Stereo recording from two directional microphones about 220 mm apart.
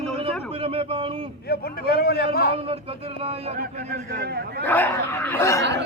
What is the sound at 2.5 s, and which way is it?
Speech, 25° right (ahead or behind).